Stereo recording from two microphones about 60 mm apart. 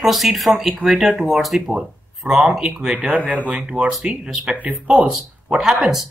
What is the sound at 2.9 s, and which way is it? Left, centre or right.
Speech, right.